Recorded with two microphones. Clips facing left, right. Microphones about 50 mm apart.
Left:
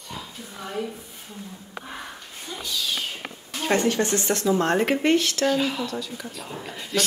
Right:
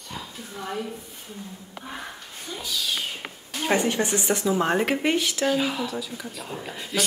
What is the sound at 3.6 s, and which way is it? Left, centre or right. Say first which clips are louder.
Speech: left 1 dB; centre.